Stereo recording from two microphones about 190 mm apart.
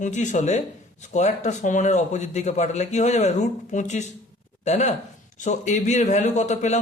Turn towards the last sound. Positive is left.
turn(degrees=40)  # may be behind; listen again after turning